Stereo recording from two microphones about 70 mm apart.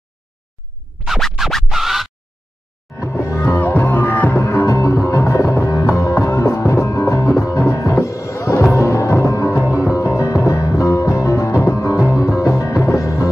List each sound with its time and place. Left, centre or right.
1.0 s music: centre
3.2 s music: left
3.5 s music: left
4.4 s music: left